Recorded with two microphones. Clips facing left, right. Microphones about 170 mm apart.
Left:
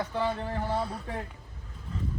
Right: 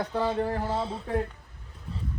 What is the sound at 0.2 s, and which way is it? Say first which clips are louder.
Speech: right 4 dB; 30° right (ahead or behind).